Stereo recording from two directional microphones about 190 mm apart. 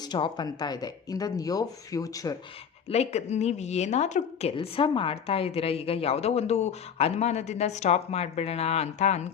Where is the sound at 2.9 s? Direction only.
35° left (ahead or behind).